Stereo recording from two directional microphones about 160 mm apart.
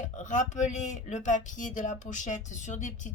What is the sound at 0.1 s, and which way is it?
Speech, 50° left (ahead or behind).